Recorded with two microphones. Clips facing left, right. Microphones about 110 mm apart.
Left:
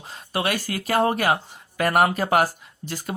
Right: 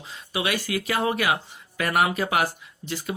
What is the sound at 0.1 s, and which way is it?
Speech, 45° left (ahead or behind).